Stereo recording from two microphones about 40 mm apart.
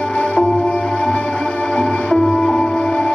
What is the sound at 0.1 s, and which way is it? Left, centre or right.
Music, left.